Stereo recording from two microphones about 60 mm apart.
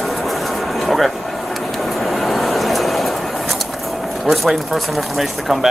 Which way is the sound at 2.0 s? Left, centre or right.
Centre.